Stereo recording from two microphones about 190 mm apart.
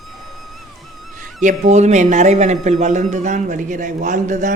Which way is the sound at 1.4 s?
35° right (ahead or behind).